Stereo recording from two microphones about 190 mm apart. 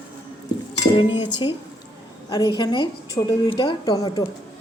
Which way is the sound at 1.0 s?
25° left (ahead or behind).